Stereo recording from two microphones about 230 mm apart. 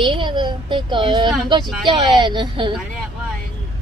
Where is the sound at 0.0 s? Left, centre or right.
Right.